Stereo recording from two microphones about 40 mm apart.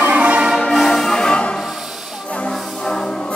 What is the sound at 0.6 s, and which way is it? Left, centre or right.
Music, centre.